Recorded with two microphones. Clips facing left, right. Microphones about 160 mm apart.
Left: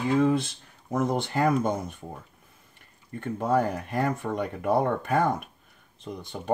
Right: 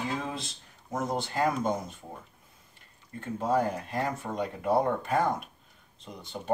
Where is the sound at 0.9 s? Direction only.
60° left (ahead or behind).